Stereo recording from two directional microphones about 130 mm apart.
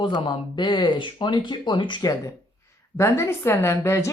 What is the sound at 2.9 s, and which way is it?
A woman's voice, 20° left (ahead or behind).